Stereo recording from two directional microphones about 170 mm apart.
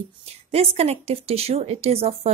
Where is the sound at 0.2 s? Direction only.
35° right (ahead or behind).